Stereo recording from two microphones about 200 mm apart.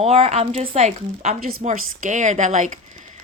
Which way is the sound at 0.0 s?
30° right (ahead or behind).